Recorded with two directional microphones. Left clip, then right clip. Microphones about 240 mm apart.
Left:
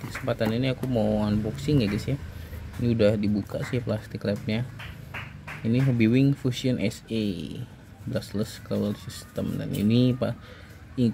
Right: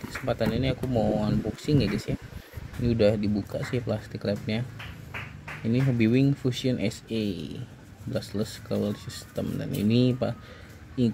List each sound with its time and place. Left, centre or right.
0.1 s speech: centre